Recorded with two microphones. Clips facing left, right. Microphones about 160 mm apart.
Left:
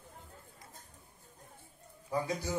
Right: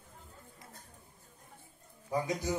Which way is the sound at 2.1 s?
20° right (ahead or behind).